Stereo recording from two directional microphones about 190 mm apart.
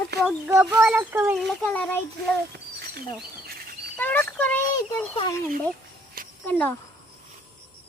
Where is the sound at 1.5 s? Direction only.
5° left (ahead or behind).